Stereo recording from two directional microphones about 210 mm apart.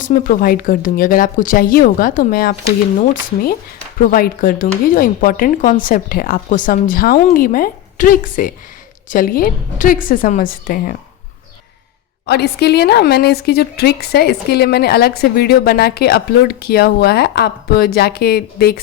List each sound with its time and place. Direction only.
0.0 s a woman's voice: 40° left (ahead or behind)
12.2 s a woman's voice: 50° left (ahead or behind)